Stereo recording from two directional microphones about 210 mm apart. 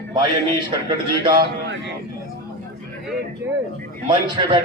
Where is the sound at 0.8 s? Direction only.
20° right (ahead or behind).